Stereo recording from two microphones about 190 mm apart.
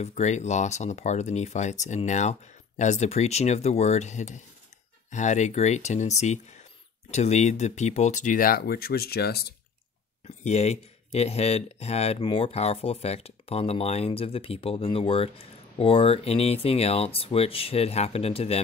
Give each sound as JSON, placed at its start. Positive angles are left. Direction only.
{"t": 0.0, "sound": "speech", "side_deg": 35}
{"t": 10.2, "sound": "speech", "side_deg": 35}